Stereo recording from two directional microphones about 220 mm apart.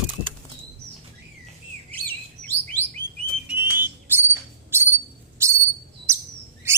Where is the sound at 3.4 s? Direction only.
10° right (ahead or behind).